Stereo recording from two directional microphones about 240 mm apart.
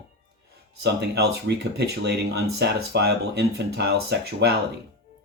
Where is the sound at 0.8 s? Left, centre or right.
Right.